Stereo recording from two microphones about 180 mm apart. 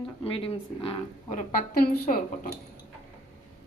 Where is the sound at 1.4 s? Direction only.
50° left (ahead or behind).